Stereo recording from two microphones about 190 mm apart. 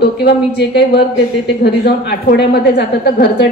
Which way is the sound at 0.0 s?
60° left (ahead or behind).